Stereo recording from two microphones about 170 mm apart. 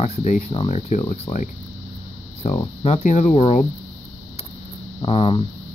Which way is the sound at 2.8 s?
45° left (ahead or behind).